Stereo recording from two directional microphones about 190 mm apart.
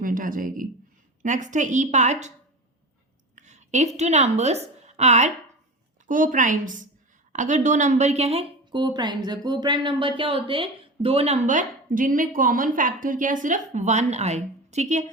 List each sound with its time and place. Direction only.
0.0 s a woman's voice: 45° right (ahead or behind)
3.3 s a woman's voice: 40° right (ahead or behind)